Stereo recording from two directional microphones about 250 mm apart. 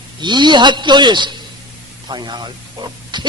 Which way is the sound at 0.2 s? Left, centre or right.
Centre.